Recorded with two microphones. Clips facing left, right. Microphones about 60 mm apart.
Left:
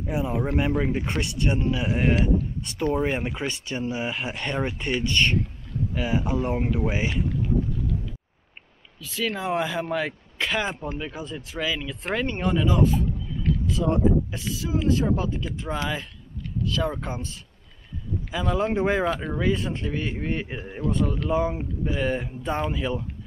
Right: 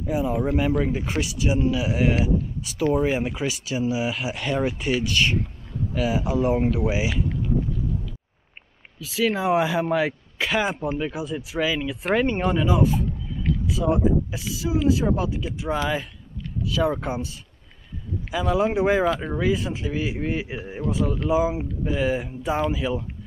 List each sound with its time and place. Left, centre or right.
0.0 s speech: centre
1.1 s speech: right
1.5 s speech: centre
9.0 s speech: centre